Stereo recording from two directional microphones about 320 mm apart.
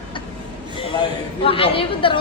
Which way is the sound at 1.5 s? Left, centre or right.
Centre.